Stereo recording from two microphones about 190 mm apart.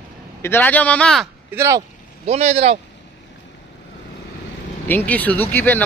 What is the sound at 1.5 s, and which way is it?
Speech, 15° right (ahead or behind).